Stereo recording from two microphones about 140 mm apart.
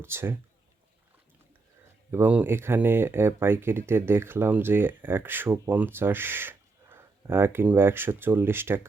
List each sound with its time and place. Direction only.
0.0 s speech: 15° right (ahead or behind)
2.1 s speech: 10° right (ahead or behind)